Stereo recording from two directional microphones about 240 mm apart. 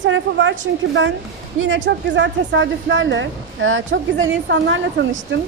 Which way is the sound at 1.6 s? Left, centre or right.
Right.